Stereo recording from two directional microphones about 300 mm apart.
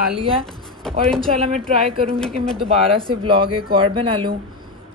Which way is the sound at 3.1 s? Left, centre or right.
Centre.